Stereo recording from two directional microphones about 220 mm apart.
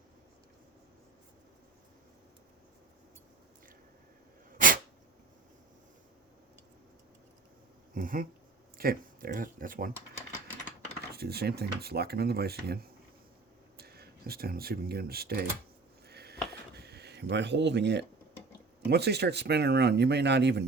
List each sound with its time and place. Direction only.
4.5 s dog: 40° right (ahead or behind)
7.9 s speech: 40° right (ahead or behind)
11.1 s speech: 45° right (ahead or behind)
16.0 s a sound: 45° right (ahead or behind)
18.9 s speech: 50° right (ahead or behind)